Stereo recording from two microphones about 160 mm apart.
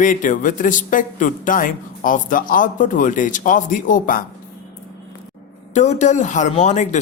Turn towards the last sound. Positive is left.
turn(degrees=45)  # may be behind; listen again after turning